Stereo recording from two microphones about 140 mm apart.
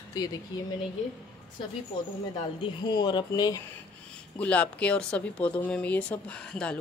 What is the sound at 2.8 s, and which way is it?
Speech, 35° left (ahead or behind).